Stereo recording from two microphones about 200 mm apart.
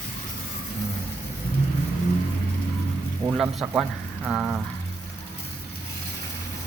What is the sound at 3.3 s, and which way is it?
Speech, centre (ahead or behind).